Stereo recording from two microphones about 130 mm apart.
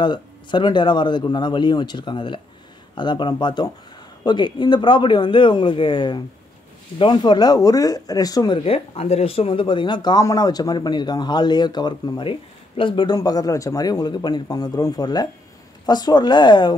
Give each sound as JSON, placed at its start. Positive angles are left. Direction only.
{"t": 0.0, "sound": "speech", "side_deg": 35}
{"t": 8.6, "sound": "speech", "side_deg": 50}